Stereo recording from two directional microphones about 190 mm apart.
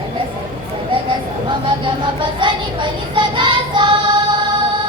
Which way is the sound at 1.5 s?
25° right (ahead or behind).